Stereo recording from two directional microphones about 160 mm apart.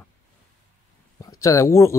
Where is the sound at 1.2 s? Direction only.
20° left (ahead or behind).